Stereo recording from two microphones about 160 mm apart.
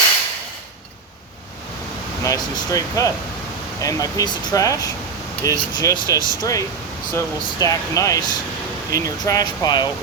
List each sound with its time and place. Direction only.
2.2 s speech: 20° left (ahead or behind)